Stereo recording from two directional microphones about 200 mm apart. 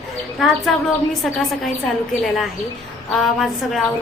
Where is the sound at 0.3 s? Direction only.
Centre (ahead or behind).